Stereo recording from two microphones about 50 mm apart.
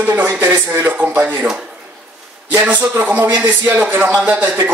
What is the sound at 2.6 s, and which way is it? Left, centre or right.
Speech, right.